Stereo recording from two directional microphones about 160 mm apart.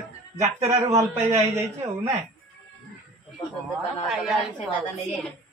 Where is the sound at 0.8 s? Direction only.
15° right (ahead or behind).